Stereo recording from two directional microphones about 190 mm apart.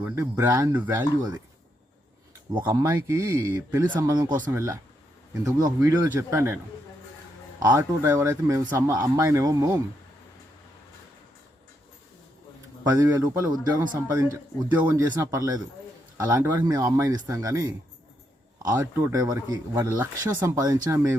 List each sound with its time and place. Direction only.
0.0 s speech: 15° right (ahead or behind)
2.6 s speech: 20° right (ahead or behind)
7.6 s speech: 15° right (ahead or behind)
12.8 s speech: 20° right (ahead or behind)
14.8 s speech: 15° right (ahead or behind)